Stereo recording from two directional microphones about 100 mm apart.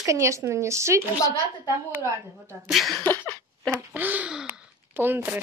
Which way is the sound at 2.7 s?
Centre (ahead or behind).